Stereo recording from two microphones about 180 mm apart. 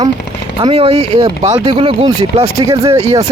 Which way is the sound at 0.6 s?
35° right (ahead or behind).